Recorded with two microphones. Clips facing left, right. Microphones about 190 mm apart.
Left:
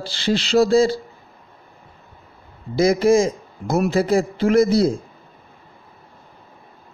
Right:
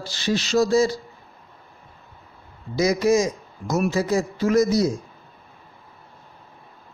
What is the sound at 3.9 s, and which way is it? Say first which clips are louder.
Speech: left 6 dB; 55° left (ahead or behind).